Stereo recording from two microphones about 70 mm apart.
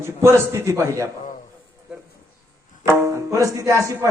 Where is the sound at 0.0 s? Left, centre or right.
Right.